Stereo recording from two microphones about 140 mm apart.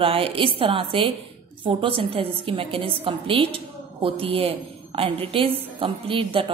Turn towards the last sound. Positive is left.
turn(degrees=-40)  # may be behind; listen again after turning